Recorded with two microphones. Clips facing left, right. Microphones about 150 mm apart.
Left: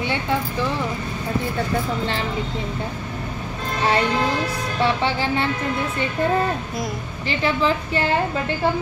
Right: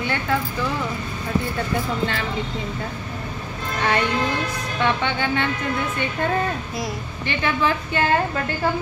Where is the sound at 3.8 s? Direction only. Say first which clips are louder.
Left 2 dB; 30° left (ahead or behind).